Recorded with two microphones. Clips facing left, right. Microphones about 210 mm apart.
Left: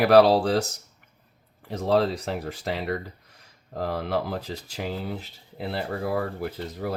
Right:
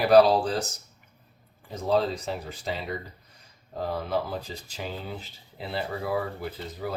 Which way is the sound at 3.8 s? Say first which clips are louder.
Left 2 dB; 85° left.